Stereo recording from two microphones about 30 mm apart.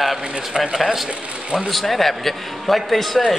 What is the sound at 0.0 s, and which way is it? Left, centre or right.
Speech, centre.